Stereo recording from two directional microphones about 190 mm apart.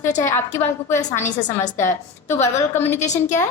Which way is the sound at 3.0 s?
40° left (ahead or behind).